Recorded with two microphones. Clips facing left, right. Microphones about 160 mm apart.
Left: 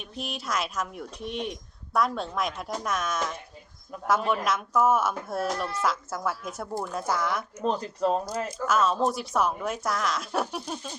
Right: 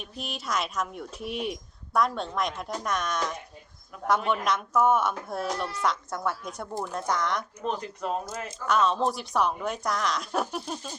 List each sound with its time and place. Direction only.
0.0 s speech: centre (ahead or behind)
7.6 s speech: 35° left (ahead or behind)
8.6 s speech: centre (ahead or behind)